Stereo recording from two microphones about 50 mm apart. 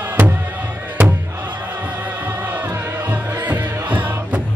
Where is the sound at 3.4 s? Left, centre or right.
Right.